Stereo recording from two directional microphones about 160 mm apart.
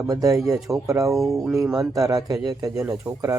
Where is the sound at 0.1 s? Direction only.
20° right (ahead or behind).